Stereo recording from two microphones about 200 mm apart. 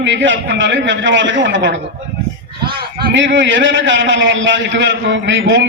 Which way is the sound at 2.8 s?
50° right (ahead or behind).